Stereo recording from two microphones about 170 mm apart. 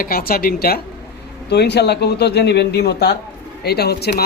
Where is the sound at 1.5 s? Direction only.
80° left.